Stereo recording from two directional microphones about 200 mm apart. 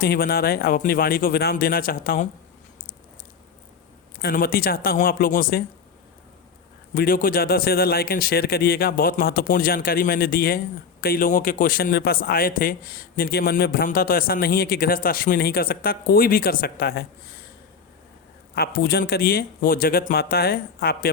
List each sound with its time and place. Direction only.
0.0 s a man's voice: 50° left (ahead or behind)
4.2 s a man's voice: 50° left (ahead or behind)
6.9 s a man's voice: 45° left (ahead or behind)
18.5 s a man's voice: 50° left (ahead or behind)